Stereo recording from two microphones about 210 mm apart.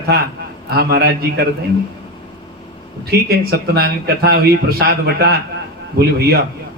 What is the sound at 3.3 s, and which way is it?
A man's voice, 50° right (ahead or behind).